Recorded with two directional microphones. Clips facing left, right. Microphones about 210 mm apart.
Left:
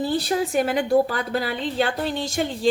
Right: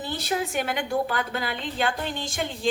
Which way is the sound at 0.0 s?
30° left (ahead or behind).